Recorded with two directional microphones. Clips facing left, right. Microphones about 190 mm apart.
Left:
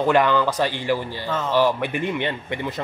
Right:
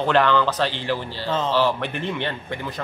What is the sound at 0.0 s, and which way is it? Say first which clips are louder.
A man's voice: left 1 dB; 10° left (ahead or behind).